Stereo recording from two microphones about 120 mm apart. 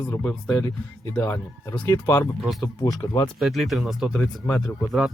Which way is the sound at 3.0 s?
45° left (ahead or behind).